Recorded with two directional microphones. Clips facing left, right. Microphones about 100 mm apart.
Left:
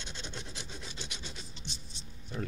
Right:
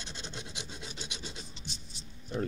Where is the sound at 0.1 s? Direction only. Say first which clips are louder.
Even; 15° right (ahead or behind).